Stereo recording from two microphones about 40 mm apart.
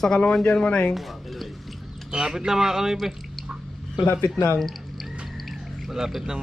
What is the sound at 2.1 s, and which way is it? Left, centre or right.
Speech, centre.